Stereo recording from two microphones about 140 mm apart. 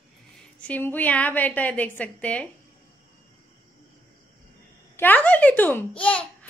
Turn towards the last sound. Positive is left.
turn(degrees=10)  # may be behind; listen again after turning